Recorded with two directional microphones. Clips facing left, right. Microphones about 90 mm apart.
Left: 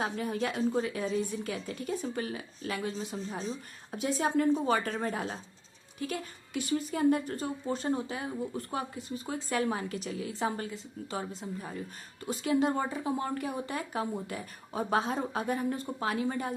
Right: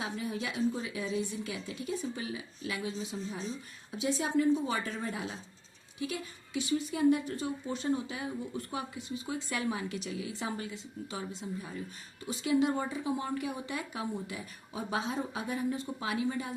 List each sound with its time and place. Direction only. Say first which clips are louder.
0.0 s a woman's voice: left 4 dB; 45° left (ahead or behind)